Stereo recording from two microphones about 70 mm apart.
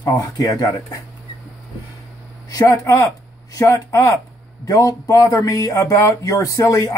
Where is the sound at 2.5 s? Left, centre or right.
Left.